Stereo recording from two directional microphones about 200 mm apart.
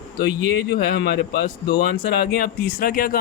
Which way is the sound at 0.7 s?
55° left (ahead or behind).